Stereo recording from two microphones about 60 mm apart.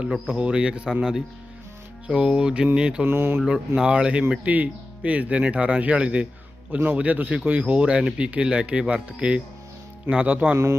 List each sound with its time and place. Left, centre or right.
0.1 s speech: centre
2.0 s speech: centre
3.1 s mantra: right
3.8 s speech: centre